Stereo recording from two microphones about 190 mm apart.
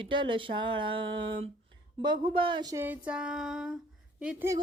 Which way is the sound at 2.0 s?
25° right (ahead or behind).